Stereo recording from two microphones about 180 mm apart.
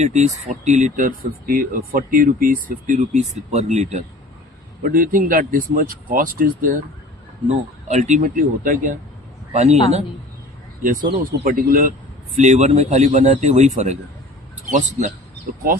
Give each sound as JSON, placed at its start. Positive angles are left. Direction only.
{"t": 0.0, "sound": "a man's voice", "side_deg": -40}
{"t": 11.4, "sound": "a man's voice", "side_deg": -50}